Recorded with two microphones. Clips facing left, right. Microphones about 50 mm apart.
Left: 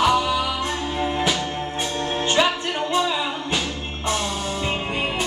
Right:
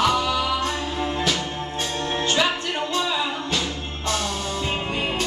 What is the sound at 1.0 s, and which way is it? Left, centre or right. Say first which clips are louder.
Music: left 2 dB; left.